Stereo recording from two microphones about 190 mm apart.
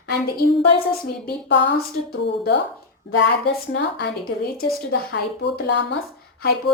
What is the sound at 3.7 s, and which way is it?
A woman's voice, 65° left (ahead or behind).